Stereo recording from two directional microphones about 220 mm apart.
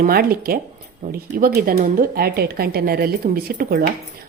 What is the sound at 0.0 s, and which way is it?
A woman's voice, 40° right (ahead or behind).